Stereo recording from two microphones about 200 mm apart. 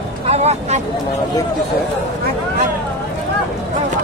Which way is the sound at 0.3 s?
35° right (ahead or behind).